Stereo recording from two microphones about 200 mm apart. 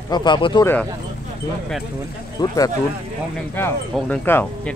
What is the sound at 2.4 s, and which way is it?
Speech, 15° left (ahead or behind).